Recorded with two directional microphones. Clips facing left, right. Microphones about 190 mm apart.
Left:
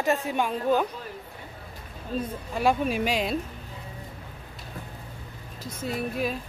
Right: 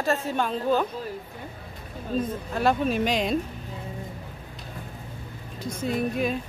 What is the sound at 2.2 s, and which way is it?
Speech, 10° left (ahead or behind).